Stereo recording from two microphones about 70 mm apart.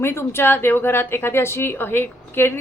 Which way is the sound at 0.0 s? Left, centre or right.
Left.